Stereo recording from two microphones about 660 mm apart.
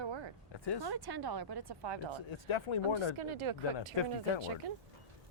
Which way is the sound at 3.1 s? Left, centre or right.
Right.